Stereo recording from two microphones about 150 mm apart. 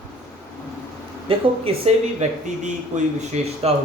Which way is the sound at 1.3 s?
40° right (ahead or behind).